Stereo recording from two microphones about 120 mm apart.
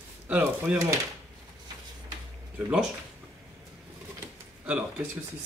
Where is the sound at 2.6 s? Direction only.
10° right (ahead or behind).